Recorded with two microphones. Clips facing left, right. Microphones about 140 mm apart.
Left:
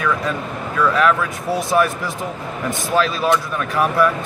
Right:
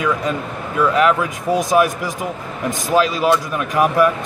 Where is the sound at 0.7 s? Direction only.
20° right (ahead or behind).